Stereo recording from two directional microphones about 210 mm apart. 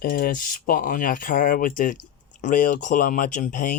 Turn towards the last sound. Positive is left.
turn(degrees=40)  # may be behind; listen again after turning